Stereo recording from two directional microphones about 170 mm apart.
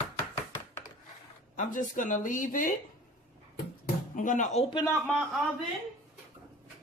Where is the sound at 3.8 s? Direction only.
50° left (ahead or behind).